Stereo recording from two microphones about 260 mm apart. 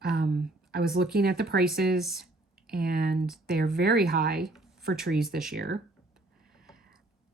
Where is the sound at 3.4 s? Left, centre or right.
Right.